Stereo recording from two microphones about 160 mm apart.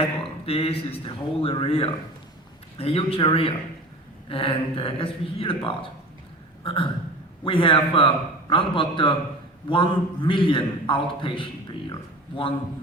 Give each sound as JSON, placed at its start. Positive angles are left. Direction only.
{"t": 0.2, "sound": "a man's voice", "side_deg": 35}
{"t": 6.7, "sound": "a man's voice", "side_deg": 35}